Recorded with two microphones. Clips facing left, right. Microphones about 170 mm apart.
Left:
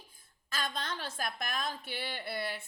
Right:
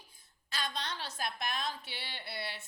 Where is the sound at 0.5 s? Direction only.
50° left (ahead or behind).